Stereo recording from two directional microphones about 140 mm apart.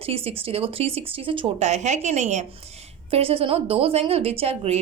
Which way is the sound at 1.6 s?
55° right (ahead or behind).